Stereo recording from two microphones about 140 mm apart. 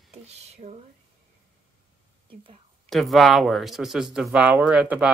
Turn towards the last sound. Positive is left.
turn(degrees=-5)  # may be behind; listen again after turning